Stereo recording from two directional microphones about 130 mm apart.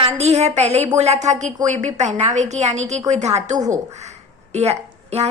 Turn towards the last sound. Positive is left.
turn(degrees=-55)  # may be behind; listen again after turning